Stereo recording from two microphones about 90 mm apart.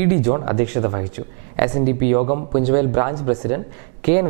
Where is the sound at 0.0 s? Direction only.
15° right (ahead or behind).